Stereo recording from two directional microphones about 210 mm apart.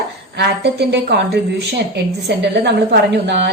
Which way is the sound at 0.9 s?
55° right (ahead or behind).